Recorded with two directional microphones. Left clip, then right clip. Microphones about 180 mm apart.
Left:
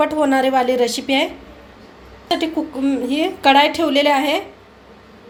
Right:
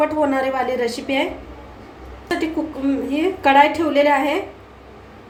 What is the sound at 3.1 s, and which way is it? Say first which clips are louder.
A woman's voice: left 1 dB; 50° left (ahead or behind).